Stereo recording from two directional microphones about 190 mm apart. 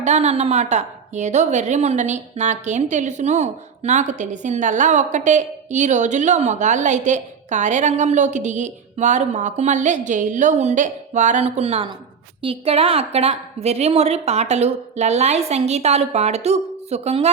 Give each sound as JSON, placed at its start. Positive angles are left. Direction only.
{"t": 0.0, "sound": "a woman's voice", "side_deg": -35}